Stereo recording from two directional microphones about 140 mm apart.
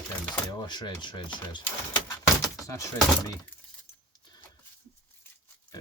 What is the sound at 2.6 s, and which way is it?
Speech, 25° left (ahead or behind).